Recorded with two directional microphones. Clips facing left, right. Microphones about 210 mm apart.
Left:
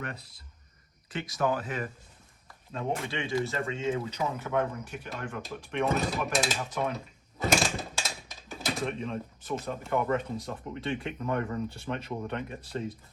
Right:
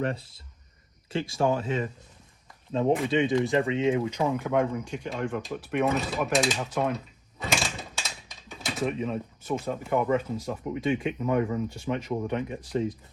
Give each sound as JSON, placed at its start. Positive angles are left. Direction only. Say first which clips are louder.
{"t": 0.0, "sound": "speech", "louder": "right 10 dB", "side_deg": -30}
{"t": 5.4, "sound": "speech", "louder": "right 1 dB", "side_deg": 0}
{"t": 6.9, "sound": "drawer open or close", "louder": "right 4 dB", "side_deg": 0}
{"t": 9.6, "sound": "speech", "louder": "right 3 dB", "side_deg": -10}